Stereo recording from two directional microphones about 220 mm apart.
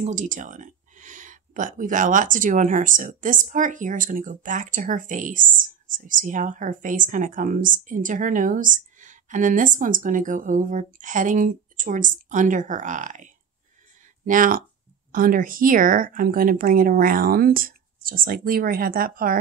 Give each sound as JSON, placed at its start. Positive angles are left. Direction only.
{"t": 0.0, "sound": "speech", "side_deg": -35}